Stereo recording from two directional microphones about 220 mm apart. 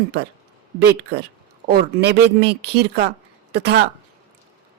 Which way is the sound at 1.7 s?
50° right (ahead or behind).